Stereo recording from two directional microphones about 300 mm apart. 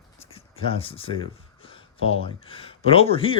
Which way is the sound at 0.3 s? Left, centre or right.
Centre.